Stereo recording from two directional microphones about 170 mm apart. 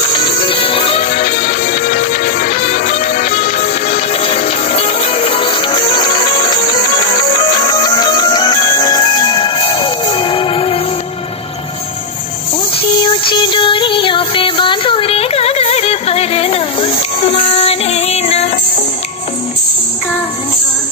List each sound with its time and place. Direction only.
0.1 s music: 30° left (ahead or behind)
1.0 s music: 50° left (ahead or behind); by 10.8 s 35° left (ahead or behind)
12.7 s music: 30° left (ahead or behind)